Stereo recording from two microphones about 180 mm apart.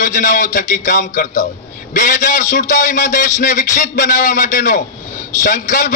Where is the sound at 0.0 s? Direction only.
45° left (ahead or behind).